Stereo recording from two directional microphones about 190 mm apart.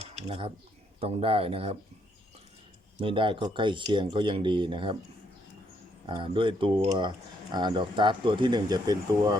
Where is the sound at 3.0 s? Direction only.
25° right (ahead or behind).